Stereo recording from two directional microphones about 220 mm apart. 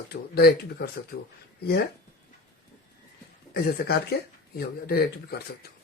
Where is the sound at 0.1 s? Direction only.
45° left (ahead or behind).